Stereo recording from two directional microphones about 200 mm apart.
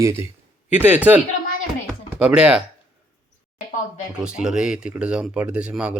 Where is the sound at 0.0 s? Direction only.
15° right (ahead or behind).